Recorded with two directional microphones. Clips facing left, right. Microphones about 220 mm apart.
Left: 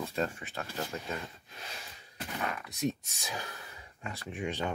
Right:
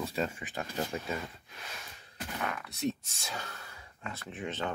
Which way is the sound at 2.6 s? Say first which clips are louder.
Even; 15° left (ahead or behind).